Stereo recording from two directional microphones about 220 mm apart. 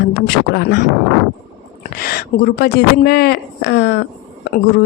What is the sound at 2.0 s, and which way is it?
Speech, 40° left (ahead or behind).